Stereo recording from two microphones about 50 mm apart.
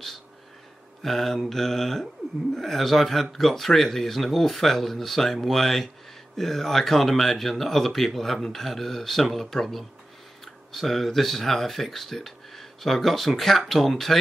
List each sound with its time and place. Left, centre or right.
1.0 s mantra: centre
2.5 s speech: centre